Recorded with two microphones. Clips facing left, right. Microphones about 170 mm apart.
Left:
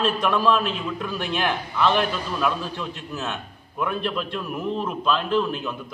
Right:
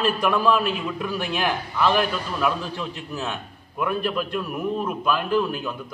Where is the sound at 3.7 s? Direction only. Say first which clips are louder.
Right 1 dB; 5° right (ahead or behind).